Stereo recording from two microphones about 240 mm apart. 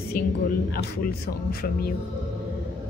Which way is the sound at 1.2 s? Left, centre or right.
Left.